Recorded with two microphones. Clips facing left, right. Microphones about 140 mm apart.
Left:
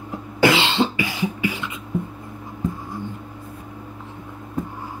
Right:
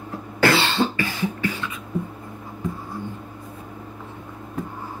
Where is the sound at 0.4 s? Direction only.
15° left (ahead or behind).